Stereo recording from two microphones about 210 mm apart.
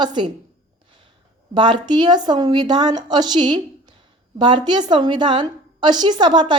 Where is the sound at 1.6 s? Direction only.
20° right (ahead or behind).